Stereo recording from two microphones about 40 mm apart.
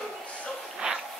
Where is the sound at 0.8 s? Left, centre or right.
Centre.